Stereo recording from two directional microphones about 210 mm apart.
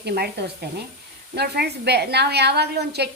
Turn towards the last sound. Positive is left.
turn(degrees=-50)  # may be behind; listen again after turning